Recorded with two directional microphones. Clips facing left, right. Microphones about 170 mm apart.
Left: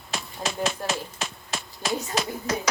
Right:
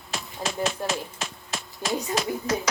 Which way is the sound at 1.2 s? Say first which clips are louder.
Left 1 dB; 65° left (ahead or behind).